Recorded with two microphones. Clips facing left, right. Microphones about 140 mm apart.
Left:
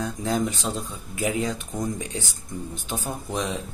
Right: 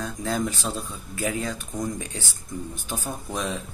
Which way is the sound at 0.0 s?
20° left (ahead or behind).